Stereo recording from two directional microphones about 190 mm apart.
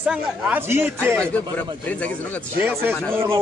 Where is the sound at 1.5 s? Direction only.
5° left (ahead or behind).